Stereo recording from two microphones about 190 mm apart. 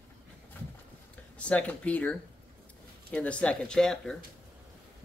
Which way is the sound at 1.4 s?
5° left (ahead or behind).